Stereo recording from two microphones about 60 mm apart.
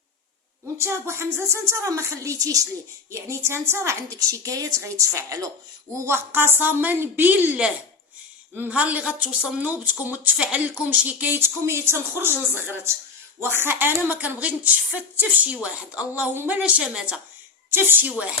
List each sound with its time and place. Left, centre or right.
0.8 s a woman's voice: right
3.1 s a woman's voice: right
4.8 s a woman's voice: right
6.1 s a woman's voice: right
11.3 s a woman's voice: right
16.3 s speech: right
16.6 s a woman's voice: right
17.7 s a woman's voice: right